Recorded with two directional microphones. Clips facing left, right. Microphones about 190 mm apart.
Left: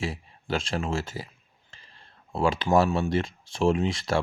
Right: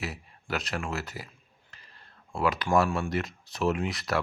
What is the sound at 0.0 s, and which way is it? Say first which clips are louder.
Speech: left 5 dB; 25° left (ahead or behind).